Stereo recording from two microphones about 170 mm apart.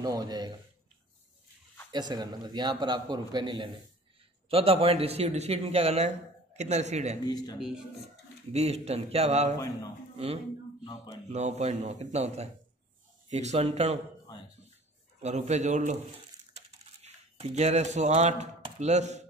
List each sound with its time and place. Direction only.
0.0 s a man's voice: 20° right (ahead or behind)
1.9 s a man's voice: 25° right (ahead or behind); by 7.2 s 40° right (ahead or behind)
7.2 s speech: 25° left (ahead or behind)
7.5 s speech: 5° right (ahead or behind)
8.5 s a man's voice: 40° right (ahead or behind)
15.1 s a man's voice: 40° right (ahead or behind)
16.5 s typing: 40° right (ahead or behind)